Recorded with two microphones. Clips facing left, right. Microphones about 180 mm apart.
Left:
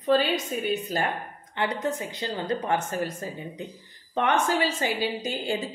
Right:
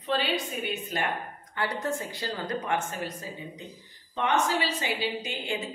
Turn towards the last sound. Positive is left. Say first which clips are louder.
# left 4 dB
turn(degrees=40)  # may be behind; listen again after turning